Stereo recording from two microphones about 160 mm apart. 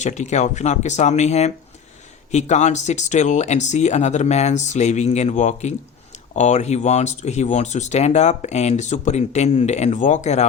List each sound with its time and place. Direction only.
0.0 s speech: 45° left (ahead or behind)